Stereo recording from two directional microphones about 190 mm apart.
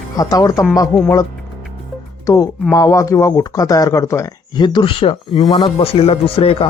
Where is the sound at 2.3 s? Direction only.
20° left (ahead or behind).